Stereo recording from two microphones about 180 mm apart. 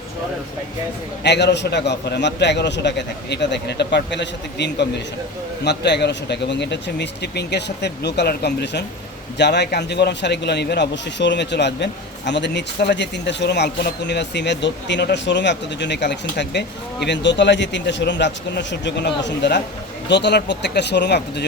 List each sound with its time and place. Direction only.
1.2 s a man's voice: 70° left (ahead or behind)